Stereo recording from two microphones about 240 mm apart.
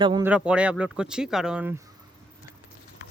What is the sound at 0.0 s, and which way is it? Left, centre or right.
Speech, centre.